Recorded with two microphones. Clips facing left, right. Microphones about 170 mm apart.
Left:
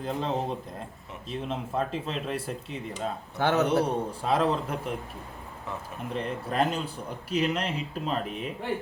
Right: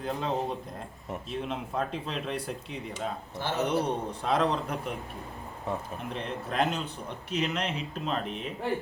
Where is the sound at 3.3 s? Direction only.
65° left (ahead or behind).